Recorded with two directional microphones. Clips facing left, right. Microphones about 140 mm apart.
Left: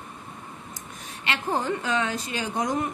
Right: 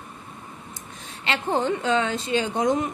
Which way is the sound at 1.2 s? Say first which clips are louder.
Right 3 dB; 25° right (ahead or behind).